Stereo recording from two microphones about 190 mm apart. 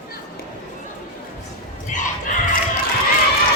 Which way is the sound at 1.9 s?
40° left (ahead or behind).